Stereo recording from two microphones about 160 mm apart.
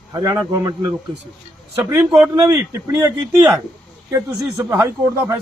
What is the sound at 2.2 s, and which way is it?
Speech, 20° right (ahead or behind).